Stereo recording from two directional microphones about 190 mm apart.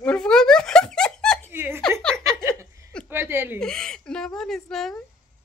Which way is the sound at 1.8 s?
5° left (ahead or behind).